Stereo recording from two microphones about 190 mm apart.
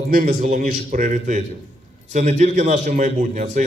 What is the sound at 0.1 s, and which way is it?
A man's voice, 50° right (ahead or behind).